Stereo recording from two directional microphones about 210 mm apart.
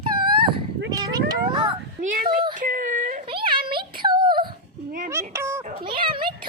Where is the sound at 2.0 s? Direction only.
40° right (ahead or behind).